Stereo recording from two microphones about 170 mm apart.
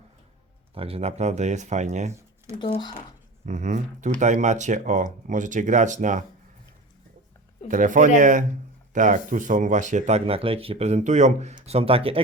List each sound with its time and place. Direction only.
0.7 s speech: 35° right (ahead or behind)
2.6 s speech: 25° left (ahead or behind)
3.4 s speech: 45° right (ahead or behind)
7.7 s speech: 50° right (ahead or behind); by 12.2 s 35° right (ahead or behind)